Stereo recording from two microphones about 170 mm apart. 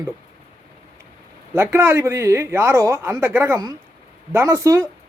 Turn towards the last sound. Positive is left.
turn(degrees=-15)  # may be behind; listen again after turning